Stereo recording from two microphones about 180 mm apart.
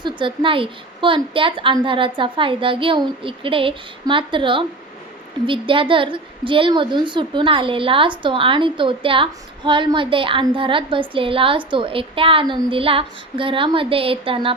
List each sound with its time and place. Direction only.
0.0 s a woman's voice: 30° right (ahead or behind)